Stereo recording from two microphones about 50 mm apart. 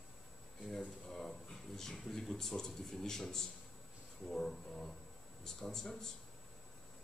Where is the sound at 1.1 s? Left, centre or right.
Centre.